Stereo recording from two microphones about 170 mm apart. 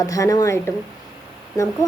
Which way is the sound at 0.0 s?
20° left (ahead or behind).